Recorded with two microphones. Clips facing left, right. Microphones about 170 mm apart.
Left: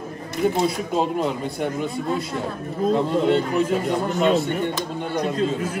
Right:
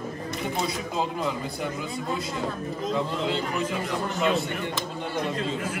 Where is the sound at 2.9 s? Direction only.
45° left (ahead or behind).